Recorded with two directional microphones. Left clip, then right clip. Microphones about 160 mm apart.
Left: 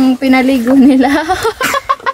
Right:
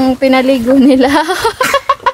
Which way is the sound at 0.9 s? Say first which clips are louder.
Right 1 dB; 65° right (ahead or behind).